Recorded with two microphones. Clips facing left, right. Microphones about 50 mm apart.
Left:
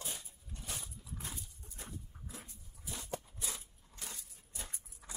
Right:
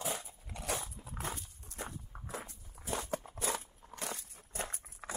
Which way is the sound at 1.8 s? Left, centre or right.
Right.